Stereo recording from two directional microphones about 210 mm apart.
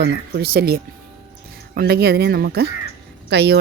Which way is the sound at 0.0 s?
55° right (ahead or behind).